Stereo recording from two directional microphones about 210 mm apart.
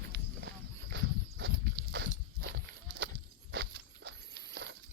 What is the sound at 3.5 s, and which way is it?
Walk, 55° right (ahead or behind).